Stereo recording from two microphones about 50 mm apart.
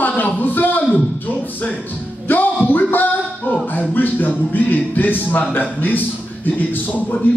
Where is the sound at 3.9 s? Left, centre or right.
Left.